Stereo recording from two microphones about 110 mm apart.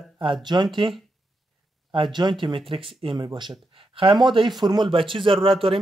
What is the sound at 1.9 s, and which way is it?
Speech, 45° right (ahead or behind).